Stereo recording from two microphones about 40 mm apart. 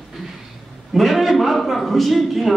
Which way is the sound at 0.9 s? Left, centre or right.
Centre.